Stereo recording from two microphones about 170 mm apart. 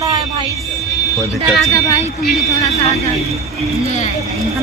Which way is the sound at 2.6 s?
40° left (ahead or behind).